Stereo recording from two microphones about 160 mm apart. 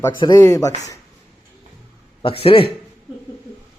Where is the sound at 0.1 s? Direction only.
25° left (ahead or behind).